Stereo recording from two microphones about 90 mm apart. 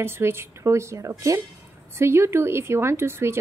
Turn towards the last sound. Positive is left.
turn(degrees=-30)  # may be behind; listen again after turning